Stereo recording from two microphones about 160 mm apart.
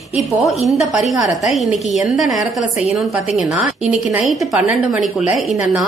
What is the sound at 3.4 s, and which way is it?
A woman's voice, centre (ahead or behind).